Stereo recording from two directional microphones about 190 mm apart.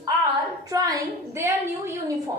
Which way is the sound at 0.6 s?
20° right (ahead or behind).